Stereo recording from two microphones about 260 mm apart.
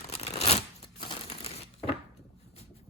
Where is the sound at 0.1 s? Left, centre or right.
Left.